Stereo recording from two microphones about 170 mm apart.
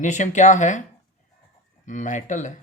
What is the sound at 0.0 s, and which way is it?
Speech, 45° left (ahead or behind).